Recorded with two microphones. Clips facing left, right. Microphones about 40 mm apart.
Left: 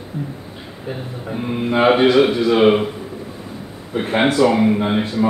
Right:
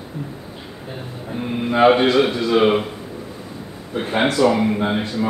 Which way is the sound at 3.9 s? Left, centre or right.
Centre.